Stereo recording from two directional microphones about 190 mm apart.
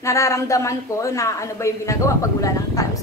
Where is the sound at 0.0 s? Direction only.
15° left (ahead or behind).